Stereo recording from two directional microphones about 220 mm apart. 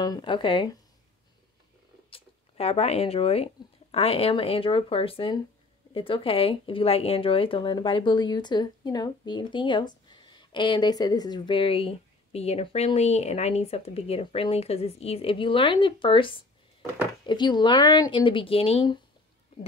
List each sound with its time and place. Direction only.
0.0 s speech: 20° left (ahead or behind)
2.0 s speech: 25° left (ahead or behind)